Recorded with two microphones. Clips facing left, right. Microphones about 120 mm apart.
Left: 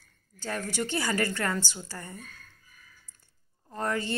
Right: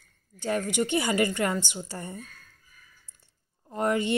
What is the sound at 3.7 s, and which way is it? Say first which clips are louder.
Speech: right 5 dB; 20° right (ahead or behind).